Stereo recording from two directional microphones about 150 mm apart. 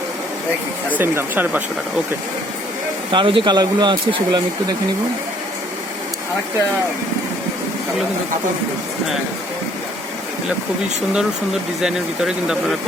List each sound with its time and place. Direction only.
0.9 s speech: 15° right (ahead or behind)
3.1 s speech: 35° right (ahead or behind)
11.8 s speech: 5° right (ahead or behind)